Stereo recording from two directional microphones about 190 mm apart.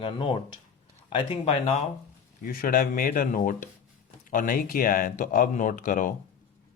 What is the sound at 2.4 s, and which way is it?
Speech, 50° left (ahead or behind).